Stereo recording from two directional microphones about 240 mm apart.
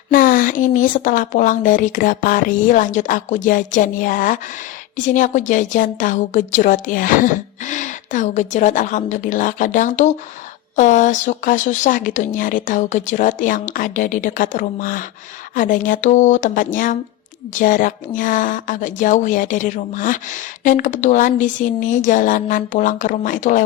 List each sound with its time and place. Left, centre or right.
0.1 s a woman's voice: left